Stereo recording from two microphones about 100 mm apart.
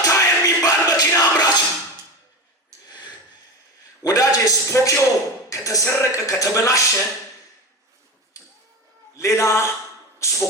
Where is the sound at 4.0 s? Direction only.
35° left (ahead or behind).